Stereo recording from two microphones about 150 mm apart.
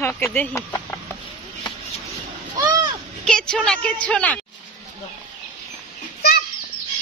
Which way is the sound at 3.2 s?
5° left (ahead or behind).